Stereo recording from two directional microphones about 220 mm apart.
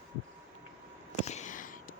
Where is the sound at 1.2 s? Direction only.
35° left (ahead or behind).